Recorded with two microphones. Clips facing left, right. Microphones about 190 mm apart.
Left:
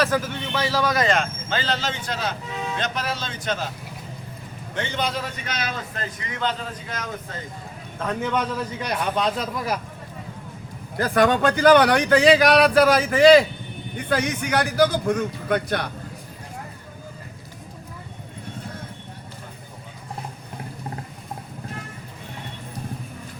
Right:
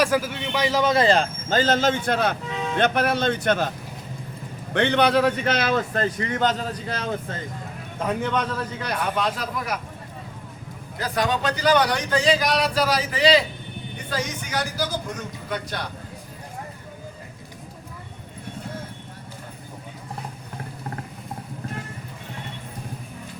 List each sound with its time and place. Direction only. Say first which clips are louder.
0.0 s a man's voice: right 1 dB; 10° right (ahead or behind); by 3.7 s 60° right (ahead or behind)
4.7 s a man's voice: right 8 dB; 65° right (ahead or behind)
5.9 s speech: right 8 dB; 45° right (ahead or behind)
7.9 s a man's voice: right 2 dB; 10° right (ahead or behind)
8.2 s a man's voice: even; 10° left (ahead or behind)
10.9 s speech: left 5 dB; 55° left (ahead or behind)
14.1 s speech: left 6 dB; 60° left (ahead or behind)